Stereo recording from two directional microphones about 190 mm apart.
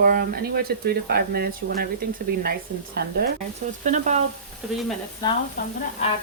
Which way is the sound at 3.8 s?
40° right (ahead or behind).